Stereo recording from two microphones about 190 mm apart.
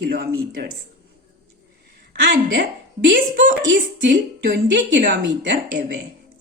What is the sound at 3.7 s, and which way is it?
Speech, 70° right (ahead or behind).